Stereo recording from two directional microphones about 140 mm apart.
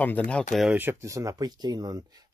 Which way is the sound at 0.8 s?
20° right (ahead or behind).